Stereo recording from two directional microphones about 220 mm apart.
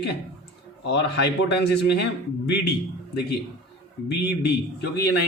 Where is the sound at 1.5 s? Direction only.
50° left (ahead or behind).